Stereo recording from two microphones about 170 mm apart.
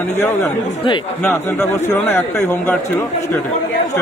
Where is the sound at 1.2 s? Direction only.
15° left (ahead or behind).